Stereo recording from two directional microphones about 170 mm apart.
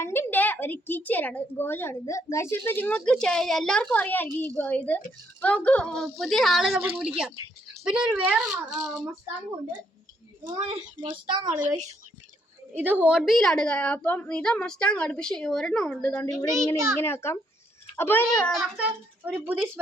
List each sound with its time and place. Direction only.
0.0 s a woman's voice: 15° left (ahead or behind)
6.7 s a child's voice: 10° right (ahead or behind)
10.4 s a woman's voice: 30° right (ahead or behind)
11.6 s a woman's voice: 45° right (ahead or behind)
12.7 s a woman's voice: 10° right (ahead or behind); by 16.3 s 5° left (ahead or behind)
16.7 s a child's voice: 20° right (ahead or behind)
17.0 s a woman's voice: 15° left (ahead or behind); by 19.5 s 10° right (ahead or behind)